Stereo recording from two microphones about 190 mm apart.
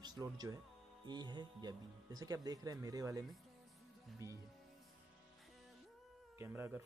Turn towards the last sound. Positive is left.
turn(degrees=-10)  # may be behind; listen again after turning